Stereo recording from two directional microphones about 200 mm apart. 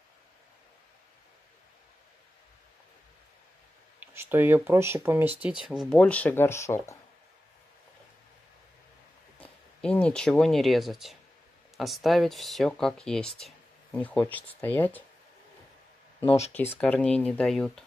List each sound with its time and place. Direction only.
4.0 s speech: 10° right (ahead or behind)
5.9 s speech: 5° left (ahead or behind)
9.4 s speech: 5° left (ahead or behind)
16.3 s speech: 30° left (ahead or behind)
16.5 s speech: 10° left (ahead or behind)